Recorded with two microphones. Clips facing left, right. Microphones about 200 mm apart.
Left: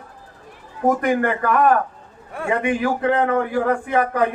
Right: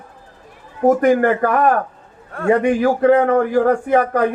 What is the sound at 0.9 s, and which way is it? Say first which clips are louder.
A man's voice: right 6 dB; 40° right (ahead or behind).